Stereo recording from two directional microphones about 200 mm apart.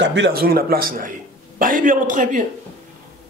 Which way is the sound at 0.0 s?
60° right (ahead or behind).